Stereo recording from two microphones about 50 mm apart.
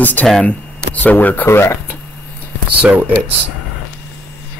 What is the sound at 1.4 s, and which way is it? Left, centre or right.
Speech, left.